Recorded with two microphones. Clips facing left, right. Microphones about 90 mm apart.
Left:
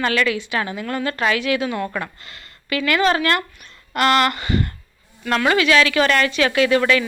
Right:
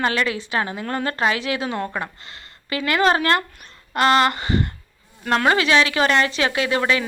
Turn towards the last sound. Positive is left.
turn(degrees=-25)  # may be behind; listen again after turning